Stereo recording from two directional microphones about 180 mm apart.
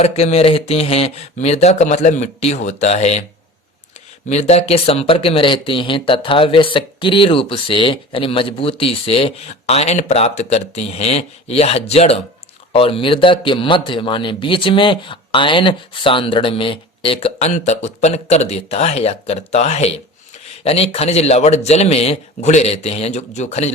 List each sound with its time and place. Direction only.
0.0 s speech: 35° left (ahead or behind)
4.3 s a man's voice: 35° left (ahead or behind)